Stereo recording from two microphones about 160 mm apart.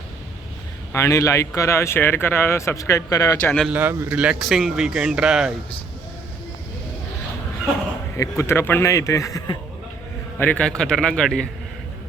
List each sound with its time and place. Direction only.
0.9 s speech: 20° left (ahead or behind)
3.7 s speech: 10° right (ahead or behind)
8.1 s speech: 15° left (ahead or behind)
10.3 s speech: 10° left (ahead or behind)